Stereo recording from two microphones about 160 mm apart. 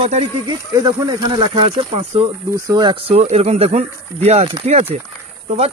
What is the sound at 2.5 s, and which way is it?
Speech, 25° right (ahead or behind).